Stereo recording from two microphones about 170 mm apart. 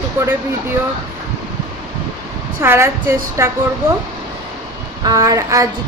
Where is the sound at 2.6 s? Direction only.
15° right (ahead or behind).